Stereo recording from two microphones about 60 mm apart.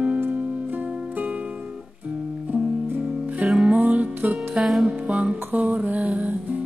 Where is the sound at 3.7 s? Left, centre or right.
Right.